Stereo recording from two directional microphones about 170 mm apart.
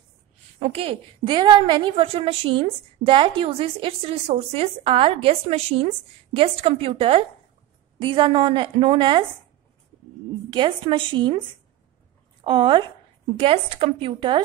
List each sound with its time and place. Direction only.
0.6 s a woman's voice: 35° right (ahead or behind)
10.5 s a woman's voice: 25° right (ahead or behind)
12.4 s a woman's voice: 30° right (ahead or behind)